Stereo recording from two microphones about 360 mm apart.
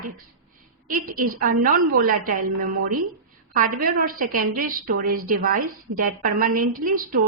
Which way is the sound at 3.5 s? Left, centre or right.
Right.